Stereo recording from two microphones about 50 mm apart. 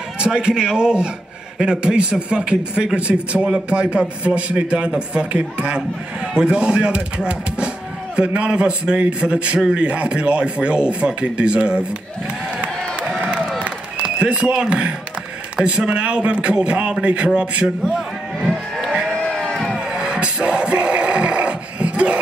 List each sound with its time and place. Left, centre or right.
0.2 s a man's voice: centre
13.7 s a sound: right
15.5 s a man's voice: right
18.4 s livestock: centre
19.1 s a sound: centre
19.8 s music: centre